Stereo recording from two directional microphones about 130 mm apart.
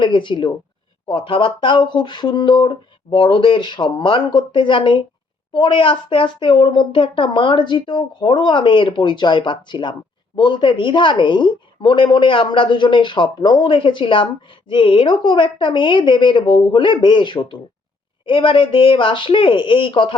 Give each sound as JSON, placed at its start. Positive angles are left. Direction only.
{"t": 0.0, "sound": "a woman's voice", "side_deg": 40}